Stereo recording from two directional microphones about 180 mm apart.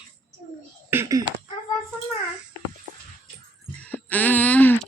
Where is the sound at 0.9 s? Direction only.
15° right (ahead or behind).